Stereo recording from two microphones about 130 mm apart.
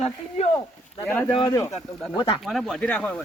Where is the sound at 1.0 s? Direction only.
15° left (ahead or behind).